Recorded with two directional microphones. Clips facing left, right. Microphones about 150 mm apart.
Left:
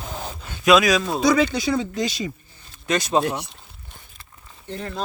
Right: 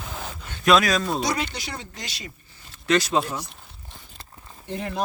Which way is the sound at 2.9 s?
20° left (ahead or behind).